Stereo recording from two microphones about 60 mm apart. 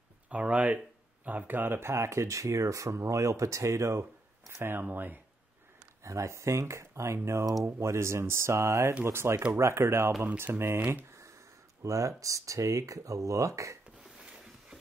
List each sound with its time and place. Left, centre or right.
0.3 s speech: right
4.6 s speech: right
6.0 s speech: right
9.0 s speech: right
11.1 s a sound: right
11.8 s speech: right
14.0 s a sound: centre